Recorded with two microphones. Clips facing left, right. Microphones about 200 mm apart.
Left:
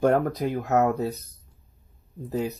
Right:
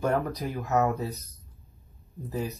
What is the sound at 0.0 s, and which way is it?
Speech, 60° left (ahead or behind).